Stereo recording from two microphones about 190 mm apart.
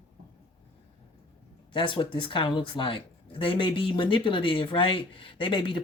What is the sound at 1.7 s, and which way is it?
Speech, 25° left (ahead or behind).